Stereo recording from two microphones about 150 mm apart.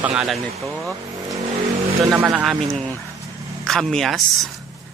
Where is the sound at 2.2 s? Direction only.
Centre (ahead or behind).